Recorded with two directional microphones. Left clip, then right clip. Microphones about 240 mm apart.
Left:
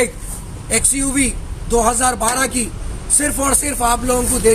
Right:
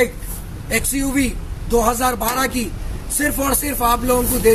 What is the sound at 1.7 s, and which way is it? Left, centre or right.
Speech, centre.